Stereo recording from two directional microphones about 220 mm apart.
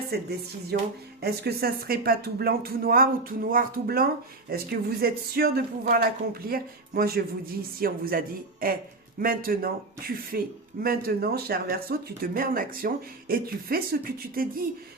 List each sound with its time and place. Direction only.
0.1 s speech: 45° right (ahead or behind)